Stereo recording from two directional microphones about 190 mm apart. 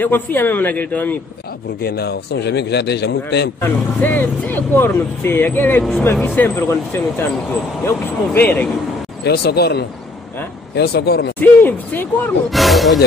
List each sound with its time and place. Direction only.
0.0 s speech: 10° left (ahead or behind)
1.8 s a man's voice: 55° left (ahead or behind)
3.6 s speech: 10° left (ahead or behind)
9.2 s a man's voice: 55° left (ahead or behind)
11.3 s speech: 10° left (ahead or behind)